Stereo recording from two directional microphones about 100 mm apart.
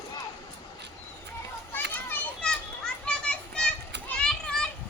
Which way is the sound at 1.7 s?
20° left (ahead or behind).